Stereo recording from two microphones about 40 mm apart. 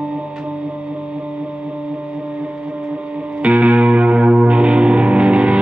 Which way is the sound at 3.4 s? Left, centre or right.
Right.